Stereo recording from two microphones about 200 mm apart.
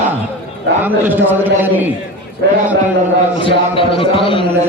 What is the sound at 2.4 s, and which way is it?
Speech, 55° right (ahead or behind).